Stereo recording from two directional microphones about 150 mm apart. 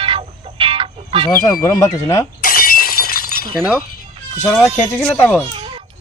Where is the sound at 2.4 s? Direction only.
75° left (ahead or behind).